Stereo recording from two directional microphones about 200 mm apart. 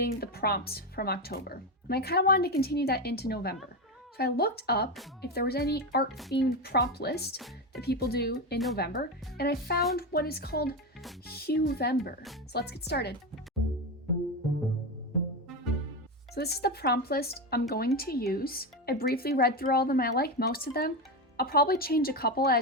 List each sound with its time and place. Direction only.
0.0 s speech: 50° left (ahead or behind)
7.3 s speech: centre (ahead or behind)
7.8 s speech: 50° left (ahead or behind)
16.3 s speech: 55° left (ahead or behind)